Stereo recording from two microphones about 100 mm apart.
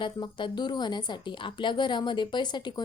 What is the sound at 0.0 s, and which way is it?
A woman's voice, 50° left (ahead or behind).